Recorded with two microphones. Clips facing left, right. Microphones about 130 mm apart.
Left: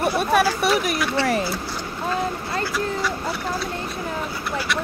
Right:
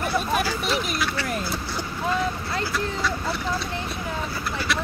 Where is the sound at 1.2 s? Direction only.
90° left.